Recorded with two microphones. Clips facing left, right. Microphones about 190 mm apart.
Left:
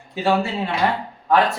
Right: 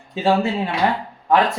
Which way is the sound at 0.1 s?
25° right (ahead or behind).